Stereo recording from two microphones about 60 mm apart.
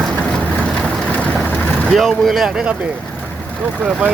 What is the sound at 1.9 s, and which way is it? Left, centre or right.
Speech, centre.